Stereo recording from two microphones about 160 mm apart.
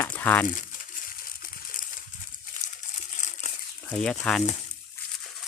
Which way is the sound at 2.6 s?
50° left (ahead or behind).